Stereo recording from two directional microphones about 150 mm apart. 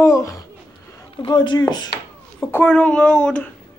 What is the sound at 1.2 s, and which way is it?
Speech, 30° left (ahead or behind).